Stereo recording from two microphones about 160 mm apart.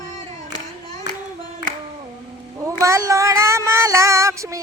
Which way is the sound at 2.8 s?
20° right (ahead or behind).